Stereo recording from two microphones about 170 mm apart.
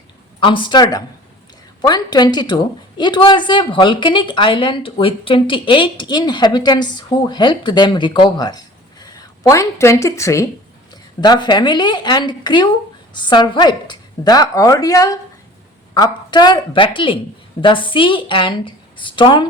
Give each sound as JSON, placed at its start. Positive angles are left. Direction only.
{"t": 0.3, "sound": "a woman's voice", "side_deg": 30}